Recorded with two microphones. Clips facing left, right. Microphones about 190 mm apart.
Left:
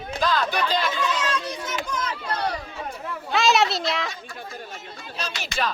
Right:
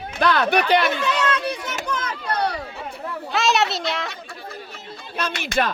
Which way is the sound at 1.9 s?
60° right (ahead or behind).